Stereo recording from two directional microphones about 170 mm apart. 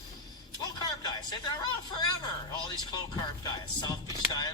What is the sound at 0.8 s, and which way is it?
Speech, 25° left (ahead or behind).